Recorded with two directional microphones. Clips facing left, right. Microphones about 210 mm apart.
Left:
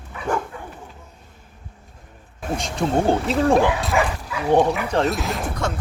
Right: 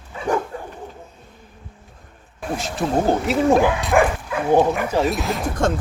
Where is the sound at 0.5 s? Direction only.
35° right (ahead or behind).